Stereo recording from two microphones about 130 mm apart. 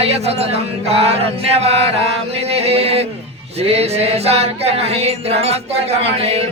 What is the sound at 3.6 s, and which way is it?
Music, 50° right (ahead or behind).